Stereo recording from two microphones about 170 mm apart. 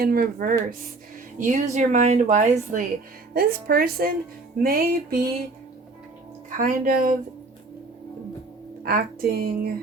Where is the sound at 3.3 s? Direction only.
60° right (ahead or behind).